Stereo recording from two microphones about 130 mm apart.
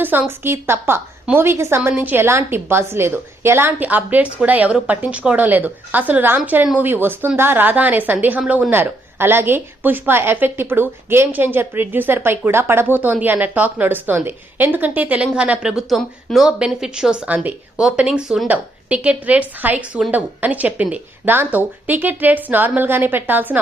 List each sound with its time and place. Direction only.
0.0 s speech: 15° right (ahead or behind)